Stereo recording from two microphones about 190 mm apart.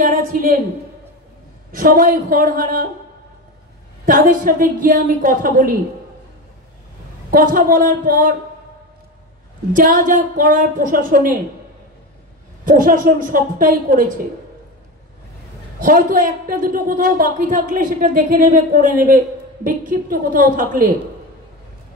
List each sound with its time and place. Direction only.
0.0 s a sound: 45° right (ahead or behind)
1.7 s a man's voice: 45° right (ahead or behind)
4.0 s a man's voice: 45° right (ahead or behind)
7.2 s a man's voice: 45° right (ahead or behind)
9.7 s a man's voice: 45° right (ahead or behind)
12.6 s a man's voice: 45° right (ahead or behind)
15.8 s a man's voice: 45° right (ahead or behind)